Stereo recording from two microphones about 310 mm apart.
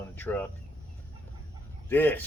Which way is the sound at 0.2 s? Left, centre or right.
Centre.